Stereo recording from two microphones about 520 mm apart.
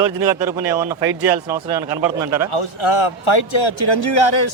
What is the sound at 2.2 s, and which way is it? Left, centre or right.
Speech, right.